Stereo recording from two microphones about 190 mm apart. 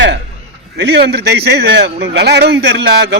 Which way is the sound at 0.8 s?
65° right (ahead or behind).